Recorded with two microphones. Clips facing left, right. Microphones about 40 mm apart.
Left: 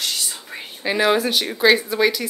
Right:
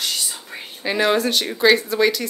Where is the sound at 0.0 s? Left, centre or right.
Centre.